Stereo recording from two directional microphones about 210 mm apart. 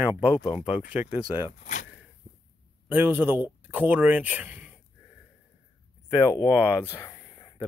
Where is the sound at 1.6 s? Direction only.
40° left (ahead or behind).